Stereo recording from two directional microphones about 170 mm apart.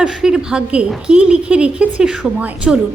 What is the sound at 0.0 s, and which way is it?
A woman's voice, 5° right (ahead or behind).